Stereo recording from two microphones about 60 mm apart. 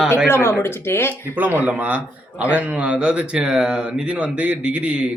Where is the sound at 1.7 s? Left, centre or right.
Right.